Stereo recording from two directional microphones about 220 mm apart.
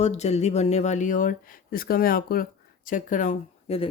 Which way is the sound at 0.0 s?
30° left (ahead or behind).